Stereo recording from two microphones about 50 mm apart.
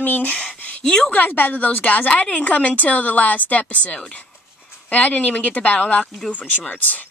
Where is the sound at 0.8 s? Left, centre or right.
Centre.